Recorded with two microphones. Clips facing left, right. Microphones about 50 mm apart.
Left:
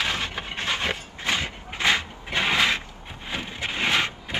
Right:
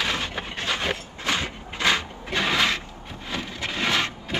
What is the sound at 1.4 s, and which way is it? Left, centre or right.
Cupboard open or close, left.